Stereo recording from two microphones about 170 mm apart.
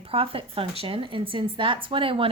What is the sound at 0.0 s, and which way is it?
A woman's voice, 35° right (ahead or behind).